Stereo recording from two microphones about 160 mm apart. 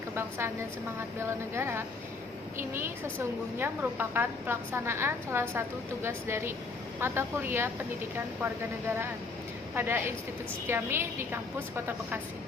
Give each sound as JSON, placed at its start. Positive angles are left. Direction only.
{"t": 0.2, "sound": "a woman's voice", "side_deg": -15}
{"t": 9.7, "sound": "a woman's voice", "side_deg": -10}